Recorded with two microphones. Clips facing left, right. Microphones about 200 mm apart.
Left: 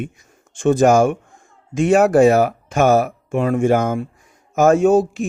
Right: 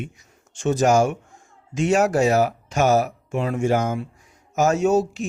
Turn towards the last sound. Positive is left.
turn(degrees=55)  # may be behind; listen again after turning